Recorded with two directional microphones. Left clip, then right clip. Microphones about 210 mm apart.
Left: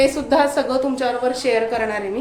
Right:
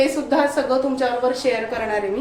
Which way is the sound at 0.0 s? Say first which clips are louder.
Left 2 dB; 45° left (ahead or behind).